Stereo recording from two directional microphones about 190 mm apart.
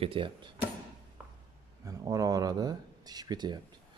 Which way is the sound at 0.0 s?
25° right (ahead or behind).